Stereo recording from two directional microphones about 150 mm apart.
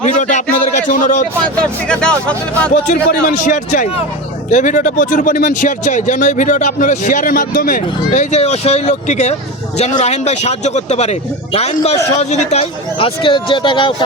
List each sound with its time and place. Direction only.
0.0 s a man's voice: 55° left (ahead or behind)
1.9 s speech: 5° left (ahead or behind)
2.8 s speech: 60° left (ahead or behind); by 13.9 s 35° left (ahead or behind)